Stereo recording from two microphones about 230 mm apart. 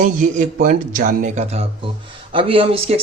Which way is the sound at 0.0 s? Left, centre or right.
Right.